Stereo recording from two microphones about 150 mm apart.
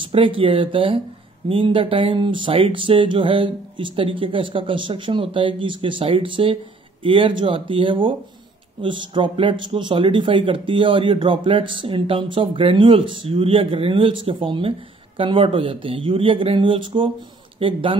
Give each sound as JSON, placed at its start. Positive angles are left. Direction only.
{"t": 0.1, "sound": "speech", "side_deg": -35}